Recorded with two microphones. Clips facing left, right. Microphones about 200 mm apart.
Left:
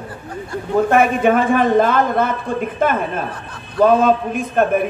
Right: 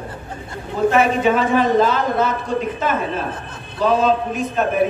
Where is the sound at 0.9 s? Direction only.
55° left (ahead or behind).